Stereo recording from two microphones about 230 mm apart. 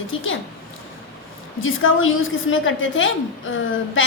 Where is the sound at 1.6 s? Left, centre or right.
Left.